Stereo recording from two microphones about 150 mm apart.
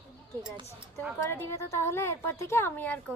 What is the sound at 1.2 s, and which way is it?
A woman's voice, 20° left (ahead or behind).